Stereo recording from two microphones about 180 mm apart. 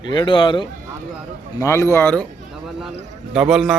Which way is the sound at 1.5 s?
15° left (ahead or behind).